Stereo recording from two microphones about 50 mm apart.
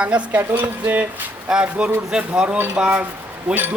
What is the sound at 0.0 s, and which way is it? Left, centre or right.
Speech, right.